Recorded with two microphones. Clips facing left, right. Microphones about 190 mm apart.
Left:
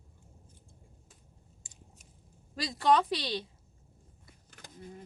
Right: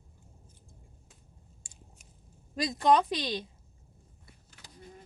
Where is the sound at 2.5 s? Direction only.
20° right (ahead or behind).